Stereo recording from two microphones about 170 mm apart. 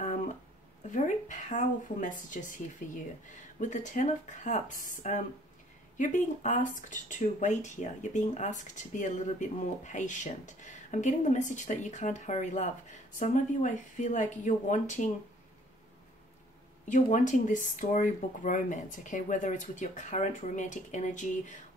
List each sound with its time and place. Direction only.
0.8 s a sound: 45° left (ahead or behind)
2.3 s speech: 50° left (ahead or behind)
16.8 s speech: 45° left (ahead or behind)